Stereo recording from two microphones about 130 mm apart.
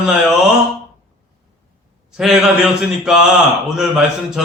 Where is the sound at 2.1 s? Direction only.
5° right (ahead or behind).